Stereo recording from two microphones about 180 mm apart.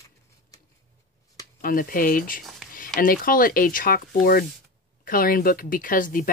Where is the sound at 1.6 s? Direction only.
50° left (ahead or behind).